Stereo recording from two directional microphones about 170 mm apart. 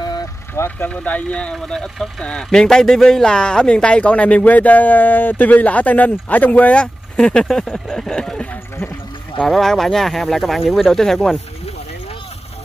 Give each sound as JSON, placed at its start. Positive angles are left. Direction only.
{"t": 0.0, "sound": "vehicle", "side_deg": 25}
{"t": 0.7, "sound": "speech", "side_deg": 10}